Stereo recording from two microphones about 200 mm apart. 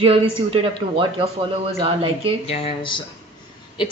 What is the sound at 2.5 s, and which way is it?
Speech, 30° left (ahead or behind).